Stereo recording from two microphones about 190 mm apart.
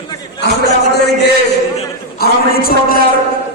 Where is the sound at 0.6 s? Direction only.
60° left (ahead or behind).